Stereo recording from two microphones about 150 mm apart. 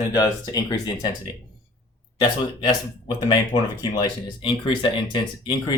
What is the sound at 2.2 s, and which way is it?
Speech, 30° left (ahead or behind).